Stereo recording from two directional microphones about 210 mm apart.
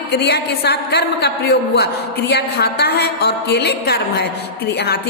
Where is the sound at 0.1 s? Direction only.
55° left (ahead or behind).